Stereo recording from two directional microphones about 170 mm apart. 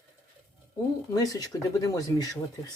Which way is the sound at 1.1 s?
20° left (ahead or behind).